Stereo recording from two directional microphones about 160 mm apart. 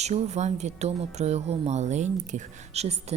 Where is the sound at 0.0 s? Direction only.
45° right (ahead or behind).